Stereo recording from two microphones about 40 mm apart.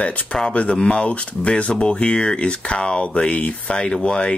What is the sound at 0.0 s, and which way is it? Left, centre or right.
Speech, left.